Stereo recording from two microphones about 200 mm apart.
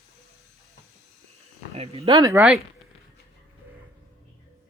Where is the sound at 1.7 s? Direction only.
30° right (ahead or behind).